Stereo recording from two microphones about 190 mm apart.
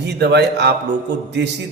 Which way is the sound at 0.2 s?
60° right (ahead or behind).